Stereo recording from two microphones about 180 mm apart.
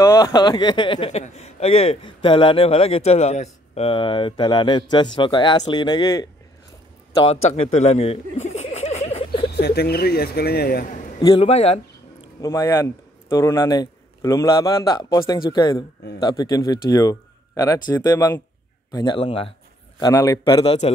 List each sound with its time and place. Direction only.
0.0 s speech: 20° left (ahead or behind)
7.2 s a sound: 35° left (ahead or behind)
9.5 s speech: 65° left (ahead or behind)
11.1 s a man's voice: 20° left (ahead or behind)
11.4 s speech: 35° left (ahead or behind)
12.4 s speech: 20° left (ahead or behind)
20.0 s speech: 20° left (ahead or behind); by 20.9 s 35° left (ahead or behind)